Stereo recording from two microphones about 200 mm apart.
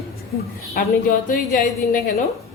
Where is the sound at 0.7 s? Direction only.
40° left (ahead or behind).